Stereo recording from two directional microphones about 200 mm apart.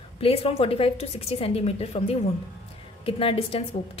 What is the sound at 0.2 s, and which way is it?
A woman's voice, 30° left (ahead or behind).